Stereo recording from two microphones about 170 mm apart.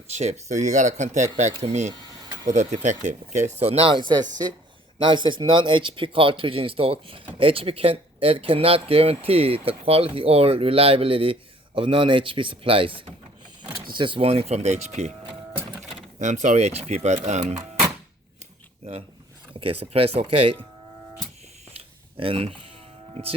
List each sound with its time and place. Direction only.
0.1 s speech: 40° right (ahead or behind)
1.9 s a sound: 25° right (ahead or behind)
2.5 s speech: 40° right (ahead or behind)
15.3 s printer: 10° right (ahead or behind)
16.1 s speech: 45° right (ahead or behind)
19.5 s speech: 35° right (ahead or behind)
22.2 s speech: 35° right (ahead or behind)